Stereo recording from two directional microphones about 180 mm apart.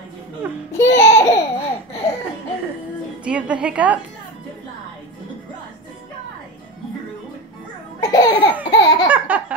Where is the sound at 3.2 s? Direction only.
5° right (ahead or behind).